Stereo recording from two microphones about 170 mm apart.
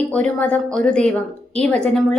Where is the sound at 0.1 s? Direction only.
10° left (ahead or behind).